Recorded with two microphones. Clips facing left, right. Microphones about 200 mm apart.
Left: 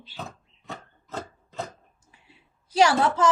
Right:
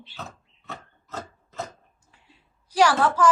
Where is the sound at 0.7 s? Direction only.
15° left (ahead or behind).